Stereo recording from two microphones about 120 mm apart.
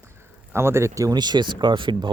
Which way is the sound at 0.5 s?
20° right (ahead or behind).